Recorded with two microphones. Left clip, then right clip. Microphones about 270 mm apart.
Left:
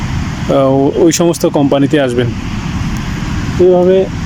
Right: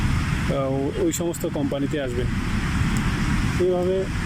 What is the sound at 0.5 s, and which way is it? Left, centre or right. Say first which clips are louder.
Speech: left 16 dB; left.